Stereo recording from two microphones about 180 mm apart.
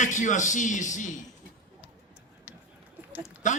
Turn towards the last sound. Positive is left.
turn(degrees=45)  # may be behind; listen again after turning